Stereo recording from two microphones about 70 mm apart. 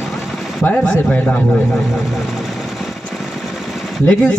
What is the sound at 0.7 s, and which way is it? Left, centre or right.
Speech, left.